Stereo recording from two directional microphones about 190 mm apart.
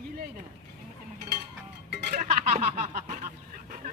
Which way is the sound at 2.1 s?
40° right (ahead or behind).